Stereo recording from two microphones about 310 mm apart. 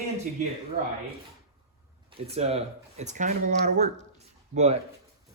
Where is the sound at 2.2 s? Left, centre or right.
Centre.